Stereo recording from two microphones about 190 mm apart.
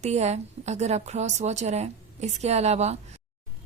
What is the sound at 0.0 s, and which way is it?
Speech, 35° right (ahead or behind).